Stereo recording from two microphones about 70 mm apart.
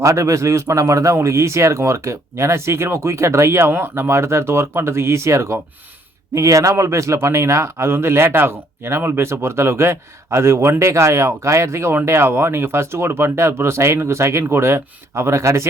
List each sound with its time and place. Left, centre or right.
0.0 s speech: right
3.7 s speech: right